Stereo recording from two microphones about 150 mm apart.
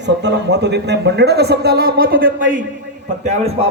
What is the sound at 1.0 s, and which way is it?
A man's voice, 90° right.